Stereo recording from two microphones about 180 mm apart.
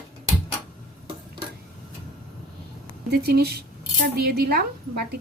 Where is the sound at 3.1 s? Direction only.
60° right (ahead or behind).